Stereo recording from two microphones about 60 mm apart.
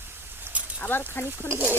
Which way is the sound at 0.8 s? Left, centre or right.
Left.